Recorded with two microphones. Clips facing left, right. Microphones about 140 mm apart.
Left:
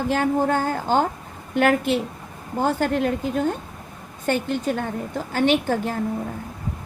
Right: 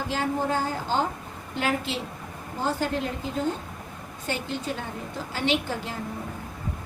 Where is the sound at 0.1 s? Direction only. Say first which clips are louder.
Left 6 dB; 55° left (ahead or behind).